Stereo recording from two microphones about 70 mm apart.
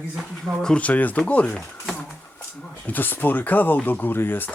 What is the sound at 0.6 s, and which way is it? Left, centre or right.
Speech, centre.